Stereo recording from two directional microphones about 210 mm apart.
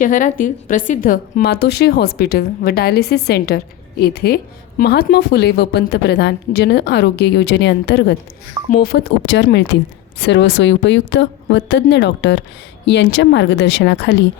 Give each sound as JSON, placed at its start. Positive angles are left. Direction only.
{"t": 0.0, "sound": "a woman's voice", "side_deg": 40}